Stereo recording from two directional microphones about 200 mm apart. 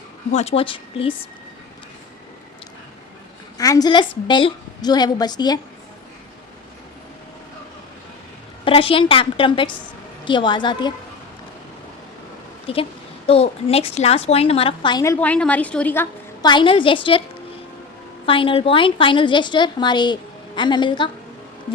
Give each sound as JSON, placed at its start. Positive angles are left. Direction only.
{"t": 0.3, "sound": "a woman's voice", "side_deg": 30}
{"t": 3.6, "sound": "a woman's voice", "side_deg": 20}
{"t": 8.6, "sound": "a woman's voice", "side_deg": 25}
{"t": 12.7, "sound": "a woman's voice", "side_deg": 30}
{"t": 16.5, "sound": "a woman's voice", "side_deg": 25}
{"t": 18.3, "sound": "a woman's voice", "side_deg": 25}